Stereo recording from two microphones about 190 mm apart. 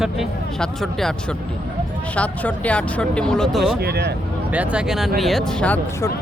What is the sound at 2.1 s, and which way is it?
Speech, 5° left (ahead or behind).